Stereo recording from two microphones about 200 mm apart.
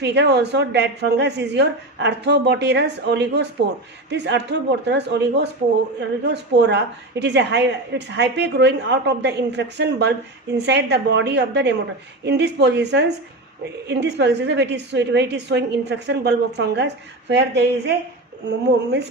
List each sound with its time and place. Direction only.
0.0 s a woman's voice: 60° right (ahead or behind)